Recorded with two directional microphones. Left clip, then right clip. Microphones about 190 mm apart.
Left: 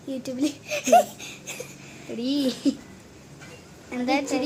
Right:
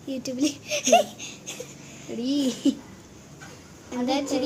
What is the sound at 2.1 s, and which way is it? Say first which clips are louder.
Speech: even; centre (ahead or behind).